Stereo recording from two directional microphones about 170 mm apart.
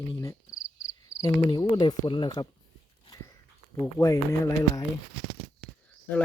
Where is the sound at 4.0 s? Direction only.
20° left (ahead or behind).